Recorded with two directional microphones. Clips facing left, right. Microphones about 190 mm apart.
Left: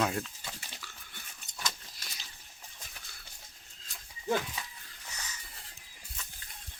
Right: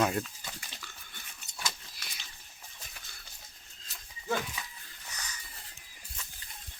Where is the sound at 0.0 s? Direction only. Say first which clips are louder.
Right 2 dB; centre (ahead or behind).